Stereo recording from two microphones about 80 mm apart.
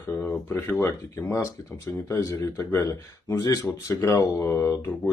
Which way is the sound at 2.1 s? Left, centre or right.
Left.